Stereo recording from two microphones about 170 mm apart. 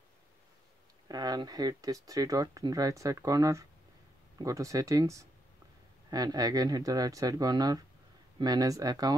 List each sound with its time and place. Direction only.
1.0 s speech: 25° right (ahead or behind)